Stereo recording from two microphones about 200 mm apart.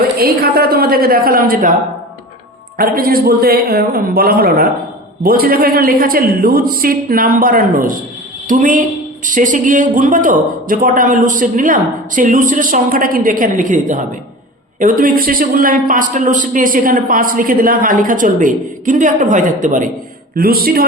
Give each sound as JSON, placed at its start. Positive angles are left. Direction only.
{"t": 0.2, "sound": "a man's voice", "side_deg": -50}
{"t": 2.7, "sound": "a man's voice", "side_deg": -45}